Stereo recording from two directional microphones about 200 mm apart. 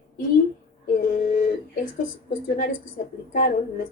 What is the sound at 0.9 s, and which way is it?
Speech, 45° left (ahead or behind).